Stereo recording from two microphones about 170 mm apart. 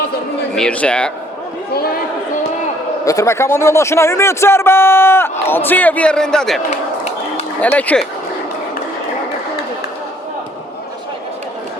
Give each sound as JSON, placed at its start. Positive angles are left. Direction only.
{"t": 0.5, "sound": "speech", "side_deg": 5}
{"t": 3.0, "sound": "a man's voice", "side_deg": 20}
{"t": 6.7, "sound": "a sound", "side_deg": 40}
{"t": 7.6, "sound": "a man's voice", "side_deg": 10}